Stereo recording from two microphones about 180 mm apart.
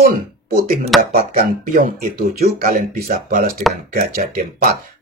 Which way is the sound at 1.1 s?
55° right (ahead or behind).